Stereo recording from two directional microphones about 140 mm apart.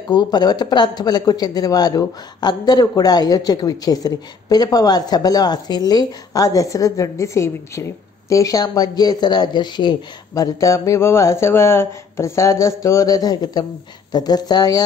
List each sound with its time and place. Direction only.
0.1 s speech: 30° left (ahead or behind)